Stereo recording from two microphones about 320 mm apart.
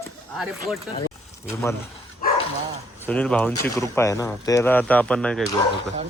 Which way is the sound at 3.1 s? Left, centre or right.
Centre.